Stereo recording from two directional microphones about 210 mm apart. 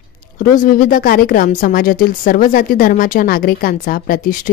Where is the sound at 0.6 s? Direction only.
40° left (ahead or behind).